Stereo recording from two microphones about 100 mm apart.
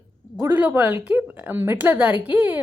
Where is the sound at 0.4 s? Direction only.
20° right (ahead or behind).